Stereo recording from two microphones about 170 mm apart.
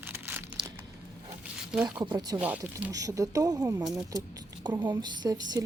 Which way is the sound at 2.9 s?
20° right (ahead or behind).